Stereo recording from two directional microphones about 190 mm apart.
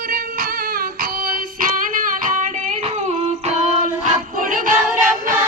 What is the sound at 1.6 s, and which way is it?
Music, 45° right (ahead or behind).